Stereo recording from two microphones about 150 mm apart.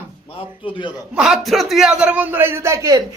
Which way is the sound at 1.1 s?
5° right (ahead or behind).